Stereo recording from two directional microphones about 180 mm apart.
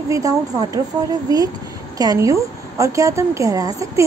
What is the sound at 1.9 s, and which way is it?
Speech, 20° right (ahead or behind).